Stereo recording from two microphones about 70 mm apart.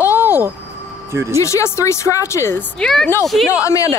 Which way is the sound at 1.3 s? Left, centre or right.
Left.